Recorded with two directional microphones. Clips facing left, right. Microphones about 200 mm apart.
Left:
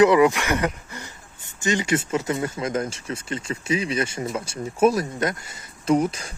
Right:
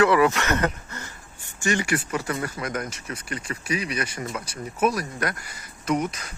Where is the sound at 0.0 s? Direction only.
20° left (ahead or behind).